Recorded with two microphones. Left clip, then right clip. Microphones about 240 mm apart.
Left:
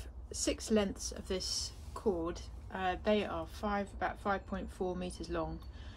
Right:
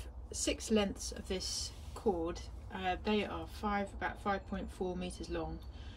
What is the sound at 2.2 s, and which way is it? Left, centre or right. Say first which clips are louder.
A woman's voice: even; centre.